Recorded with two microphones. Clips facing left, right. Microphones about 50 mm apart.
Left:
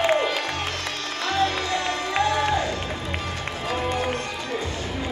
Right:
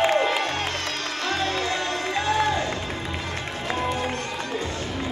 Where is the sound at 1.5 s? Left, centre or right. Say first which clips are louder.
Even; right.